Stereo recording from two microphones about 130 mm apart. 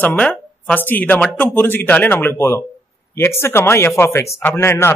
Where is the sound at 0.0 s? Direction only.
10° left (ahead or behind).